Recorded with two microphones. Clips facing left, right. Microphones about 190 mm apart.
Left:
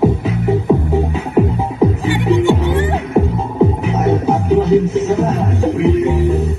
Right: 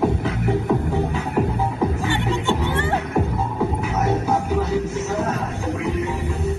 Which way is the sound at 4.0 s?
55° left (ahead or behind).